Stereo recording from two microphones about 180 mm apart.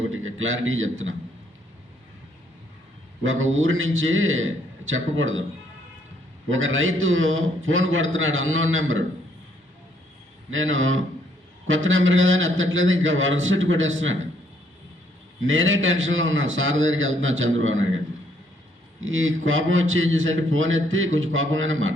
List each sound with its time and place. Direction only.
0.1 s a man's voice: 90° right
3.2 s a man's voice: 90° right
6.5 s a man's voice: 90° right
10.5 s a man's voice: 90° right
15.4 s a man's voice: 90° right
18.9 s a man's voice: 90° right